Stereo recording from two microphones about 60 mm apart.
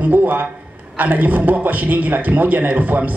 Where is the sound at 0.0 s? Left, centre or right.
Right.